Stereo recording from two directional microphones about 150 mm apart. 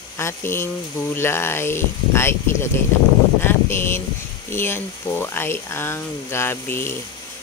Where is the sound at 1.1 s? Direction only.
15° left (ahead or behind).